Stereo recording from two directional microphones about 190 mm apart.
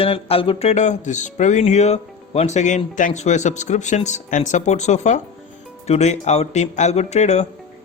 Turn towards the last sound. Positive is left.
turn(degrees=35)  # may be behind; listen again after turning